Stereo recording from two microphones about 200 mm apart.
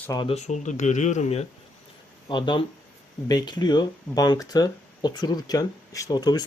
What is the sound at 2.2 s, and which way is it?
Speech, 20° left (ahead or behind).